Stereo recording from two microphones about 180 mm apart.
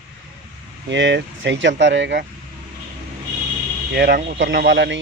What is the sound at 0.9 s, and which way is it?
Speech, 90° right.